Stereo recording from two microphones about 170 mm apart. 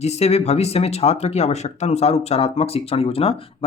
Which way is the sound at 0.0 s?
40° left (ahead or behind).